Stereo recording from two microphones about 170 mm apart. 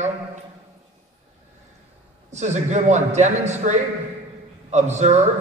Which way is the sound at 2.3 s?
45° right (ahead or behind).